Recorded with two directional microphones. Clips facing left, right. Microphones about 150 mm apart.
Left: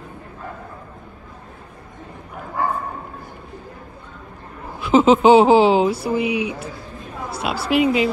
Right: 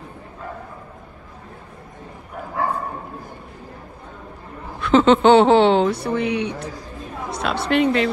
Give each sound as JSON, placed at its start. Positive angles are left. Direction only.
{"t": 4.7, "sound": "a woman's voice", "side_deg": 5}